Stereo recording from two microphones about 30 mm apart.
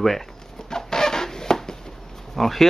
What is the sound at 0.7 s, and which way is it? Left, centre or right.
Chicken, centre.